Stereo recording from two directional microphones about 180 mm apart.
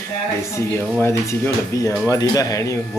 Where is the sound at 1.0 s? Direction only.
15° left (ahead or behind).